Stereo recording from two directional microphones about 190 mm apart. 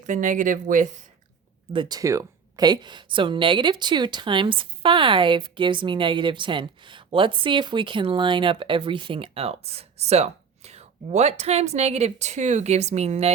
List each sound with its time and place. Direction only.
0.0 s speech: 40° right (ahead or behind)
1.7 s speech: 20° right (ahead or behind)